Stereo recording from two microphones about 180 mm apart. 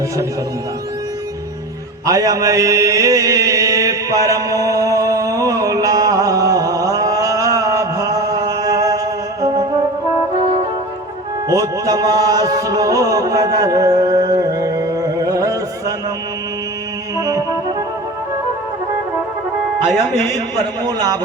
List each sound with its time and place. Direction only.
2.0 s mantra: 20° right (ahead or behind)
11.4 s music: 20° right (ahead or behind)
17.2 s music: 20° right (ahead or behind)
19.8 s music: centre (ahead or behind)